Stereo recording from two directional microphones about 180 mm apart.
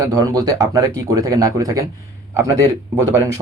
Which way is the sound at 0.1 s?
20° right (ahead or behind).